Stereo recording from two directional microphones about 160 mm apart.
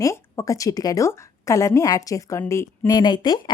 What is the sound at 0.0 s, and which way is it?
Speech, 20° left (ahead or behind).